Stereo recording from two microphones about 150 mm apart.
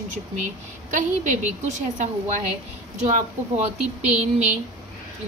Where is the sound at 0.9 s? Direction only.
55° right (ahead or behind).